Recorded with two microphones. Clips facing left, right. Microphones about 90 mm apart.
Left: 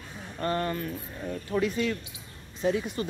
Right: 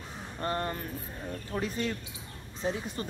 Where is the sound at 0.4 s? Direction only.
30° right (ahead or behind).